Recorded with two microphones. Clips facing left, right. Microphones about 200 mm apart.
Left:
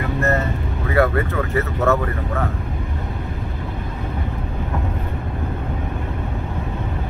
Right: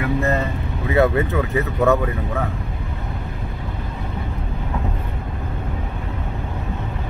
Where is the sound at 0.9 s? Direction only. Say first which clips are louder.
Right 1 dB; 20° right (ahead or behind).